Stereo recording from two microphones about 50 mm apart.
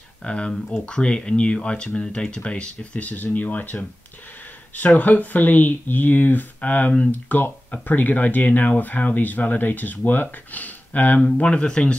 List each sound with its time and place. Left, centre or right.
0.2 s speech: left
0.5 s speech: centre
0.8 s speech: left
4.8 s speech: left
11.3 s speech: centre